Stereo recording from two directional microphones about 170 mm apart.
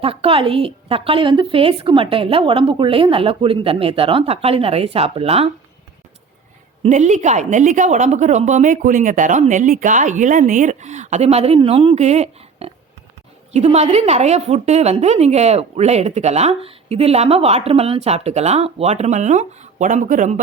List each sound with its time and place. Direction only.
0.0 s a woman's voice: 35° right (ahead or behind)
6.8 s a woman's voice: 40° right (ahead or behind)